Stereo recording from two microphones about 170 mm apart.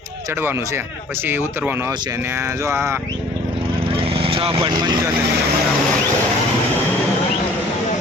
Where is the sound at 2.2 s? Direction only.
15° right (ahead or behind).